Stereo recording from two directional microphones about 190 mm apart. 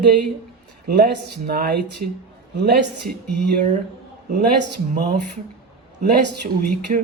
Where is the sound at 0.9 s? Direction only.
55° right (ahead or behind).